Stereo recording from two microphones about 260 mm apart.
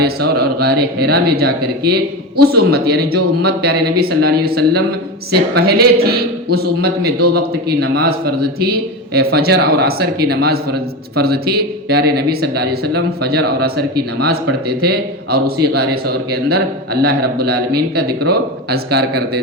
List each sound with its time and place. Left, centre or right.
0.0 s a man's voice: right